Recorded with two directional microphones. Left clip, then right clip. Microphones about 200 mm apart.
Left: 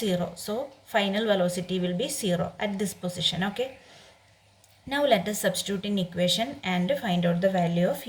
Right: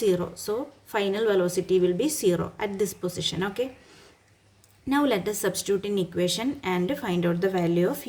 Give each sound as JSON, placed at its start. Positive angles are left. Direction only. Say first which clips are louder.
{"t": 0.9, "sound": "speech", "louder": "even", "side_deg": -35}
{"t": 4.9, "sound": "speech", "louder": "left 1 dB", "side_deg": -35}